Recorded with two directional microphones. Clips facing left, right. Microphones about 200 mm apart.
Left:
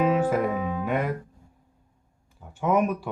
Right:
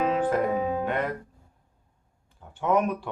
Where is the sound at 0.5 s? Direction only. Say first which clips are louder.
Right 2 dB; 40° right (ahead or behind).